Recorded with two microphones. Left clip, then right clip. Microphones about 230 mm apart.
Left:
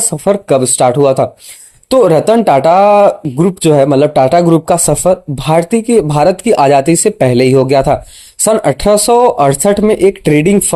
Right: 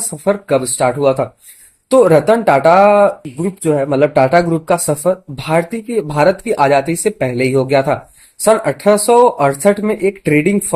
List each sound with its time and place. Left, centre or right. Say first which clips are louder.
0.3 s speech: left 4 dB; left